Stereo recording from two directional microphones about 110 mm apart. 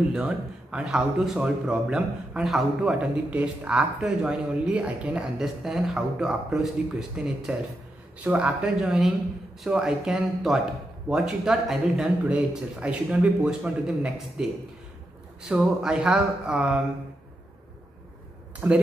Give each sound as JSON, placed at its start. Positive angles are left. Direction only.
{"t": 0.1, "sound": "a man's voice", "side_deg": -10}
{"t": 18.6, "sound": "a man's voice", "side_deg": -20}